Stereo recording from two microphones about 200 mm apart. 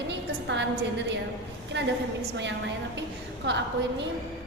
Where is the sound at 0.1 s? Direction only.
60° right (ahead or behind).